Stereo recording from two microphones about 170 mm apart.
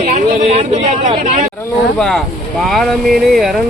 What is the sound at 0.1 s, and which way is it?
Speech, 40° right (ahead or behind).